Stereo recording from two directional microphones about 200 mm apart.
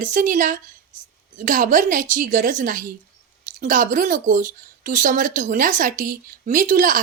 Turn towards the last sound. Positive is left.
turn(degrees=-40)  # may be behind; listen again after turning